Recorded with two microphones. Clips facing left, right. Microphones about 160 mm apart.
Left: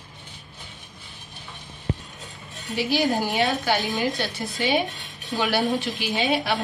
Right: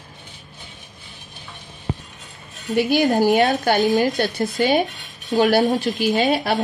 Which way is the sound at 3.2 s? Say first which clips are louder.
Right 7 dB; 45° right (ahead or behind).